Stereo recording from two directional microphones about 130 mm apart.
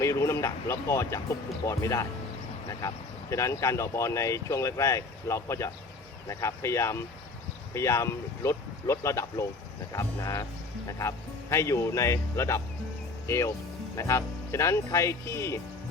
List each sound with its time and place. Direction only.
0.0 s speech: 20° left (ahead or behind)